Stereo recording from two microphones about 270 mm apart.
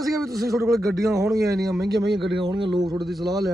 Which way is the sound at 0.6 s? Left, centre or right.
Centre.